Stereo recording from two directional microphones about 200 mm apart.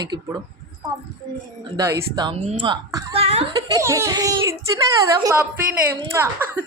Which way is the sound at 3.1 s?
30° right (ahead or behind).